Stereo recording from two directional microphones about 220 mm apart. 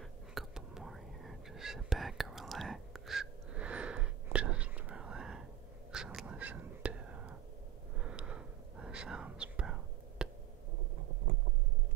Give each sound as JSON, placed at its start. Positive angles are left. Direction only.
{"t": 0.3, "sound": "whispering", "side_deg": 0}